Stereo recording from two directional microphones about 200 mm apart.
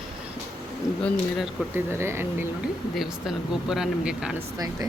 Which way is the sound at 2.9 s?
Centre (ahead or behind).